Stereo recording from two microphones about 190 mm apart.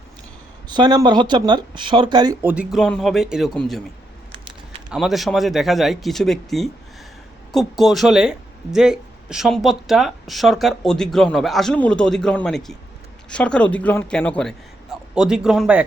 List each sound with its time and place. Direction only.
0.7 s speech: 20° right (ahead or behind); by 3.8 s 5° left (ahead or behind)
4.9 s speech: centre (ahead or behind)